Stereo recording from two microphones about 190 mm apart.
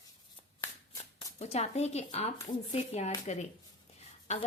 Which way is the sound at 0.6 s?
15° left (ahead or behind).